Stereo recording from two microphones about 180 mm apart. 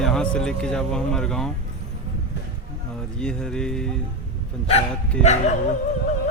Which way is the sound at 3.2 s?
5° left (ahead or behind).